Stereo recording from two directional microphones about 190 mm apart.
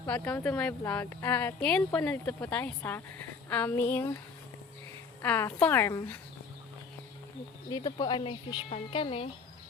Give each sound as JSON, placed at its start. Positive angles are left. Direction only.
{"t": 0.0, "sound": "speech", "side_deg": 10}
{"t": 5.2, "sound": "speech", "side_deg": 10}
{"t": 7.7, "sound": "a woman's voice", "side_deg": 20}